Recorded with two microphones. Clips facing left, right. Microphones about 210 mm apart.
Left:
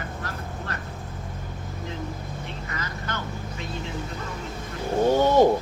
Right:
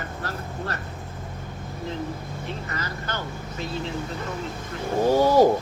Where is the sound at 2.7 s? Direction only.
35° right (ahead or behind).